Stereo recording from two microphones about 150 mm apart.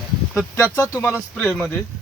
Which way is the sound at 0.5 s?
20° left (ahead or behind).